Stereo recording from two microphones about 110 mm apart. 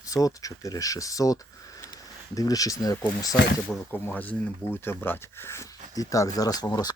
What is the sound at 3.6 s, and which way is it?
Speech, 15° left (ahead or behind).